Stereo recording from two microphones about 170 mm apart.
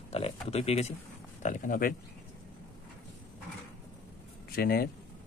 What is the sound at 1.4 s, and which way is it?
Speech, 50° left (ahead or behind).